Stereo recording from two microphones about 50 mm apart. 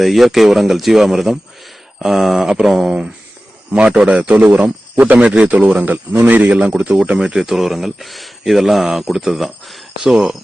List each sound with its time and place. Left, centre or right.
0.0 s speech: centre
3.7 s a man's voice: right
6.5 s a man's voice: right
7.3 s speech: centre